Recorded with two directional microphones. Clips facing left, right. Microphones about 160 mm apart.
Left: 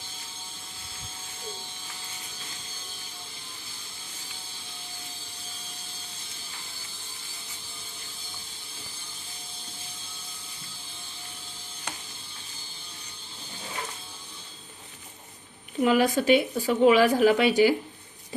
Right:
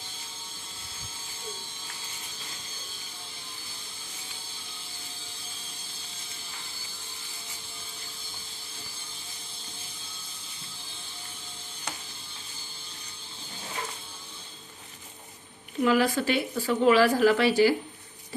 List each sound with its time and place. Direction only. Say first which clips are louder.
15.8 s speech: left 1 dB; 20° left (ahead or behind)